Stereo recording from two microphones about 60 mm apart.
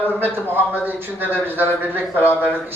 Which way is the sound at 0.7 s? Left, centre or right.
Right.